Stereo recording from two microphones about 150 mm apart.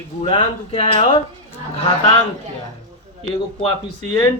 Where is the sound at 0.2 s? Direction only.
40° left (ahead or behind).